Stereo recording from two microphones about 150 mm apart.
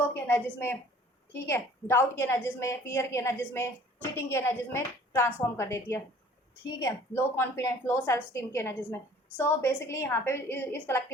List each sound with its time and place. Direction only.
0.0 s a woman's voice: 15° left (ahead or behind)